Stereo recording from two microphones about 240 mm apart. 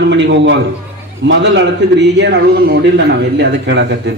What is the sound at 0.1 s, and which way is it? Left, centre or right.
Music, right.